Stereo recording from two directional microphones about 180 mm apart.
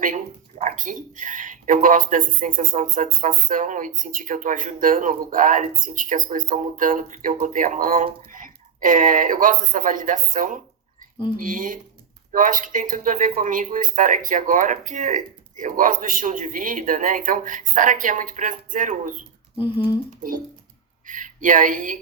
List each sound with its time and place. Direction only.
0.6 s speech: 45° right (ahead or behind)
19.5 s speech: 25° left (ahead or behind)
21.1 s speech: 45° right (ahead or behind)